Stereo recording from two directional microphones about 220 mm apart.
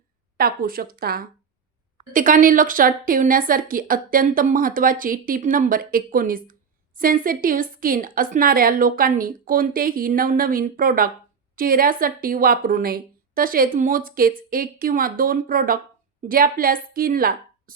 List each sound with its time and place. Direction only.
0.3 s a woman's voice: 40° right (ahead or behind)